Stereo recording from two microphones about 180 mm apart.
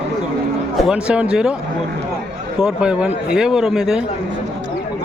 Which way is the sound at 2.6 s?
5° right (ahead or behind).